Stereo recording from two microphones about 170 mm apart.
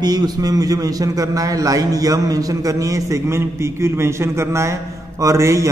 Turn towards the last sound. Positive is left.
turn(degrees=-20)  # may be behind; listen again after turning